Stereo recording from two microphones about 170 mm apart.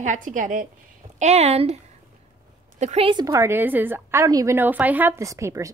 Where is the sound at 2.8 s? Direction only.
40° right (ahead or behind); by 5.7 s 15° right (ahead or behind).